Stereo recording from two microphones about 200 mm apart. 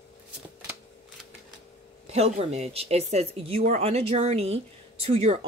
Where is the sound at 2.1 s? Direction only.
35° right (ahead or behind).